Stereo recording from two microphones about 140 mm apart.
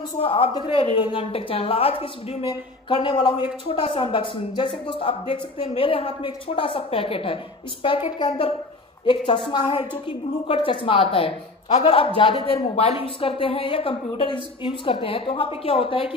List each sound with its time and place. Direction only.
0.2 s speech: 40° left (ahead or behind)